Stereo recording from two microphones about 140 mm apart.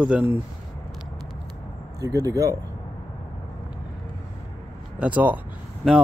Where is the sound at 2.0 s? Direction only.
25° right (ahead or behind).